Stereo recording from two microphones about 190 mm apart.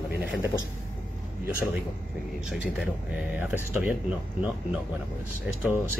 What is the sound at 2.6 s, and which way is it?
Speech, 5° right (ahead or behind).